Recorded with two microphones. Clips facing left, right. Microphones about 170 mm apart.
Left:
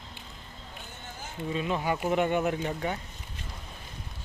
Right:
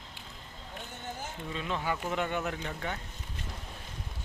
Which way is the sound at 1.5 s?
15° left (ahead or behind).